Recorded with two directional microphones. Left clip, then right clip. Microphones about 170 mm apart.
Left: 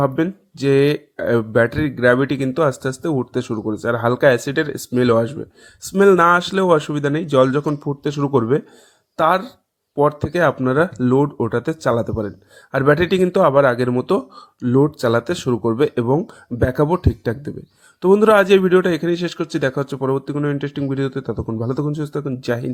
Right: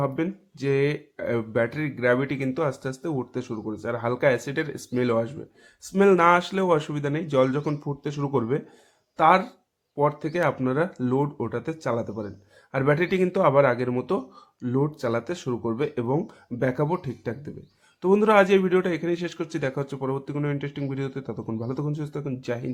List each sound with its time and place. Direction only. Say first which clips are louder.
0.0 s speech: left 8 dB; 40° left (ahead or behind)